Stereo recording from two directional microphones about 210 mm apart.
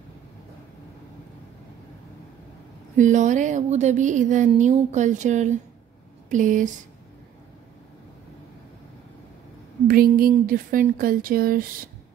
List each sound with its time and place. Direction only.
3.0 s speech: 35° right (ahead or behind)
9.8 s speech: 45° right (ahead or behind)